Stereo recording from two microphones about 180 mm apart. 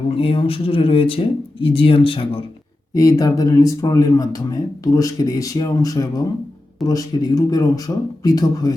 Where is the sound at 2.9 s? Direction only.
20° left (ahead or behind).